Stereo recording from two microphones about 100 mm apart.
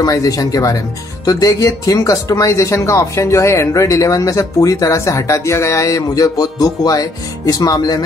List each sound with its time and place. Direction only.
0.0 s speech: 35° left (ahead or behind)